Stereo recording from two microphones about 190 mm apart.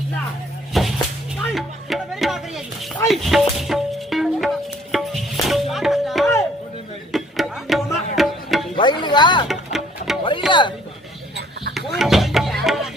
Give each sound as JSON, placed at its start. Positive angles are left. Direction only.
{"t": 0.7, "sound": "a sound", "side_deg": 0}
{"t": 1.4, "sound": "music", "side_deg": 0}
{"t": 8.7, "sound": "music", "side_deg": 25}
{"t": 9.5, "sound": "music", "side_deg": 0}
{"t": 10.5, "sound": "speech", "side_deg": 25}
{"t": 11.9, "sound": "music", "side_deg": 0}